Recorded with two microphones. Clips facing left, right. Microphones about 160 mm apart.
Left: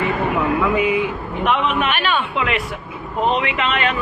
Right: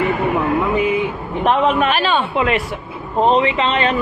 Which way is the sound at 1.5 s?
40° right (ahead or behind).